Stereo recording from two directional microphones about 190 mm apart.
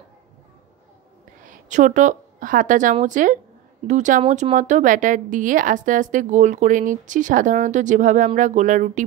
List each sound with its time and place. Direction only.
1.4 s a woman's voice: 40° right (ahead or behind)